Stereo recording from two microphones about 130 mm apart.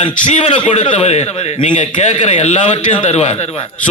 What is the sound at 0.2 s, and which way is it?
Speech, 70° left (ahead or behind).